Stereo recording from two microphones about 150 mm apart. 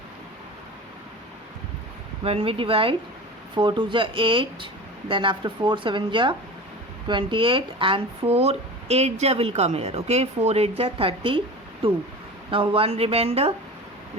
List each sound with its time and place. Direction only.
2.2 s speech: 40° right (ahead or behind)